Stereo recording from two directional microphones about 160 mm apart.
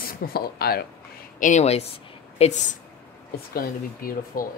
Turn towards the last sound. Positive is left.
turn(degrees=65)  # may be behind; listen again after turning